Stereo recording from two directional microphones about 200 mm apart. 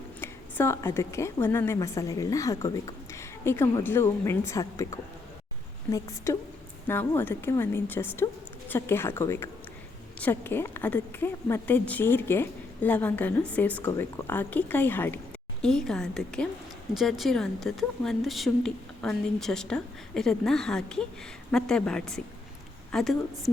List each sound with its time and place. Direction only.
0.2 s a woman's voice: 10° left (ahead or behind)